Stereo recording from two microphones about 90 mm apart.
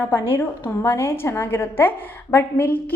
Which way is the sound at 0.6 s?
30° left (ahead or behind).